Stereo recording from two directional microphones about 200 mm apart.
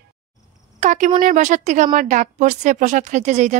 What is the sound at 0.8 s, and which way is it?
Speech, 35° right (ahead or behind).